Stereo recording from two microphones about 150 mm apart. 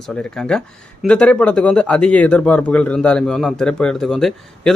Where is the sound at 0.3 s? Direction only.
5° left (ahead or behind).